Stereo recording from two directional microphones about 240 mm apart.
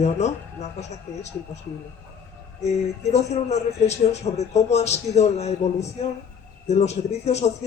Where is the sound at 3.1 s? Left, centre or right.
Left.